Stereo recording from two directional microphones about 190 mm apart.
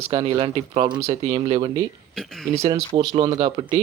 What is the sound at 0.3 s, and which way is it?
Speech, 25° right (ahead or behind).